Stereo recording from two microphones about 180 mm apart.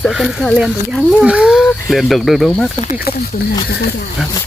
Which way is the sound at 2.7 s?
40° left (ahead or behind).